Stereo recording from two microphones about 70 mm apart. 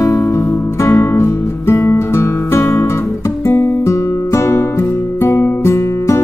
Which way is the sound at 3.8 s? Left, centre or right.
Left.